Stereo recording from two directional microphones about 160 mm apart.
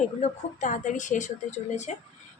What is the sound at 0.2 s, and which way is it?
A woman's voice, 50° left (ahead or behind).